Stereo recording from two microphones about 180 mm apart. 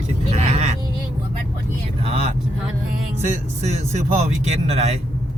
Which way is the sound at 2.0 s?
35° right (ahead or behind).